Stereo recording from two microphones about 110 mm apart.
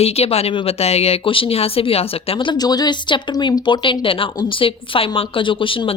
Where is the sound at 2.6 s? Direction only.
40° left (ahead or behind).